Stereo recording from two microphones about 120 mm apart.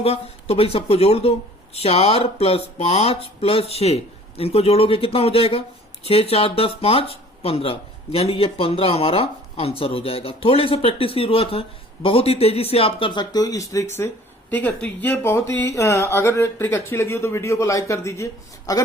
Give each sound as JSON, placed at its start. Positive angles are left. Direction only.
{"t": 0.0, "sound": "speech", "side_deg": 55}